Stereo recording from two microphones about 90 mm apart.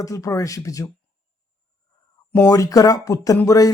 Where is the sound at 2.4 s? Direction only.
40° left (ahead or behind).